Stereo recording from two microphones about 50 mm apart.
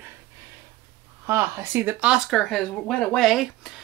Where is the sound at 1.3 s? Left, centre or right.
Right.